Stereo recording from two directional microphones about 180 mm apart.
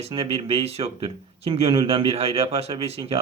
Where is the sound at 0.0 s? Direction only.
30° right (ahead or behind).